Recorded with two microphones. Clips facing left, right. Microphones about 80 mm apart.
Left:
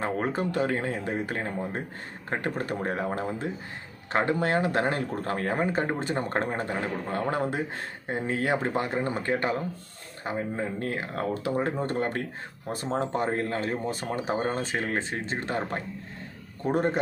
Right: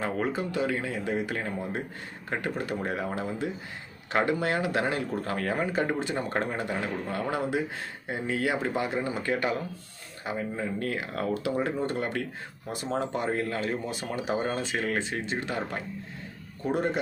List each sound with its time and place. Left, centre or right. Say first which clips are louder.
0.0 s speech: left 1 dB; left